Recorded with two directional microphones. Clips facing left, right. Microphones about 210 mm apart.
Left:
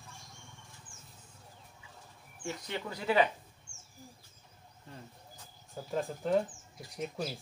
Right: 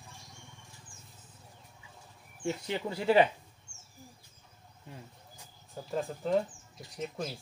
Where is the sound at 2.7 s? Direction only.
30° right (ahead or behind).